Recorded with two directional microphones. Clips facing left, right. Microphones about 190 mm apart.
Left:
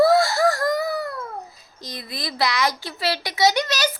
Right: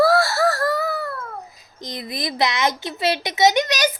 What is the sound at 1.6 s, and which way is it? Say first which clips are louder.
Speech: right 4 dB; 20° right (ahead or behind).